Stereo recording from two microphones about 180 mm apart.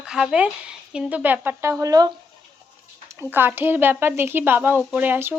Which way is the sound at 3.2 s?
10° right (ahead or behind).